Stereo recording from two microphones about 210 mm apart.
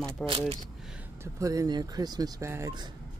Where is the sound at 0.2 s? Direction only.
5° left (ahead or behind).